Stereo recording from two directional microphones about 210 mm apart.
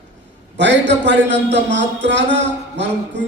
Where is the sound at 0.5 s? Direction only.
55° right (ahead or behind).